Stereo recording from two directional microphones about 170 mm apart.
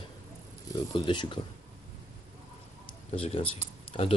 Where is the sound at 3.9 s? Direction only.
35° left (ahead or behind).